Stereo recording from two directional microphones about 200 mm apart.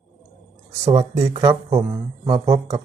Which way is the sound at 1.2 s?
15° right (ahead or behind).